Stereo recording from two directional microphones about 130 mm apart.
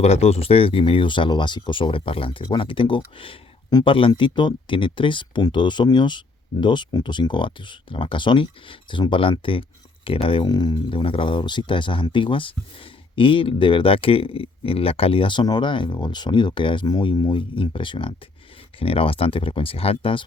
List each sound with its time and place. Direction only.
0.0 s speech: 55° left (ahead or behind)
3.7 s speech: 30° left (ahead or behind)